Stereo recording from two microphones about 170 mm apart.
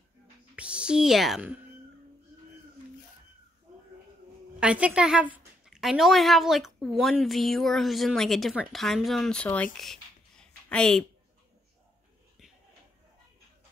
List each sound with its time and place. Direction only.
0.6 s a child's voice: 5° right (ahead or behind)
4.6 s a woman's voice: 5° right (ahead or behind)